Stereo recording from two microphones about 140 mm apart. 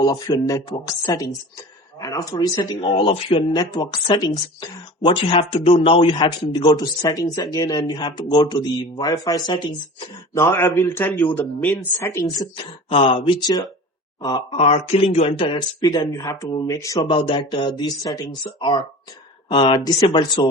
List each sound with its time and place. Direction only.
0.0 s speech: 30° left (ahead or behind)
10.3 s a man's voice: 20° left (ahead or behind)
12.5 s speech: 40° left (ahead or behind)
14.5 s speech: 45° left (ahead or behind); by 17.2 s 25° left (ahead or behind)
17.2 s speech: 35° left (ahead or behind)
19.5 s speech: 35° left (ahead or behind)